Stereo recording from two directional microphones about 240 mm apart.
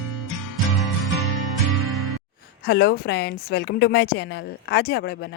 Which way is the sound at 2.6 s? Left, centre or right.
Left.